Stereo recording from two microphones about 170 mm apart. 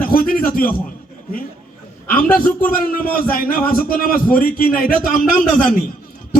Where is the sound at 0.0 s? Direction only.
55° left (ahead or behind).